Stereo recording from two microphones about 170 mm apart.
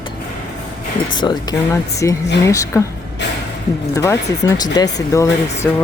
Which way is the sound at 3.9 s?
20° left (ahead or behind).